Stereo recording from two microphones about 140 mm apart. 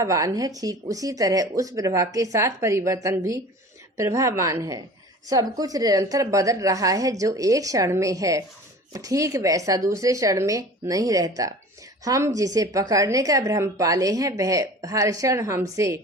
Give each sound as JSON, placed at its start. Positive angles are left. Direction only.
{"t": 0.0, "sound": "a woman's voice", "side_deg": -25}